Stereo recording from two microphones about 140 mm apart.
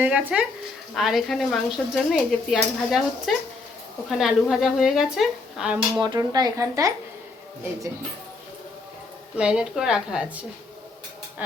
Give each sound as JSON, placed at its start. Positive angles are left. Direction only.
{"t": 0.0, "sound": "speech", "side_deg": -10}
{"t": 6.0, "sound": "speech", "side_deg": -30}
{"t": 9.4, "sound": "speech", "side_deg": -5}